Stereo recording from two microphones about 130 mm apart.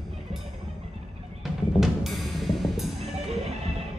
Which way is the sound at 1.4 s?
Centre (ahead or behind).